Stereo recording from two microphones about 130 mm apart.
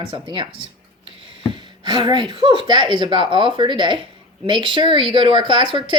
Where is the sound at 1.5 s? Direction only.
35° right (ahead or behind).